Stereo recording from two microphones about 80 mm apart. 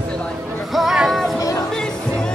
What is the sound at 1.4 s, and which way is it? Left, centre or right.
Music, left.